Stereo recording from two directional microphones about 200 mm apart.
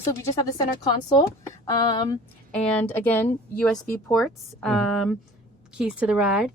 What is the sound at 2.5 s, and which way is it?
A woman's voice, 5° left (ahead or behind).